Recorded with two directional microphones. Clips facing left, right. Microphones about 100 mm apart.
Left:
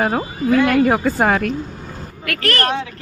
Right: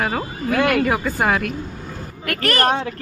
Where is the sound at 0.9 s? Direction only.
35° left (ahead or behind).